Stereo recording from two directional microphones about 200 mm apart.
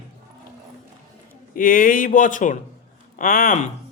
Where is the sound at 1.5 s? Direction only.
45° left (ahead or behind).